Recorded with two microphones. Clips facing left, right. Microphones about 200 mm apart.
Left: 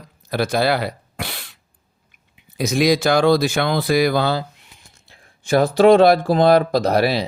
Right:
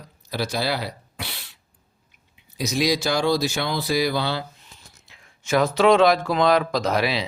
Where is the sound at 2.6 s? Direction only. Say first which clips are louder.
Left 6 dB; 55° left (ahead or behind).